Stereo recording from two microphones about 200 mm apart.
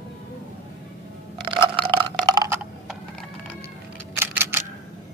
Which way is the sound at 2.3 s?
20° right (ahead or behind).